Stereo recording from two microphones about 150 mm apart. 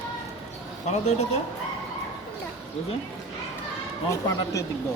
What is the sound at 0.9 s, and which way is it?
Speech, 50° left (ahead or behind).